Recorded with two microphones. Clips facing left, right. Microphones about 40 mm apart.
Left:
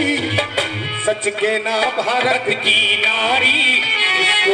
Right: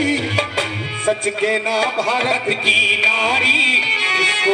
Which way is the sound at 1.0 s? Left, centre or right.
Centre.